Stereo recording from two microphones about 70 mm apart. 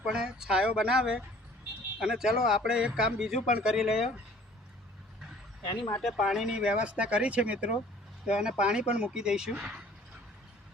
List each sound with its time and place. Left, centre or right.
0.0 s a man's voice: centre
6.0 s speech: centre
6.2 s a man's voice: centre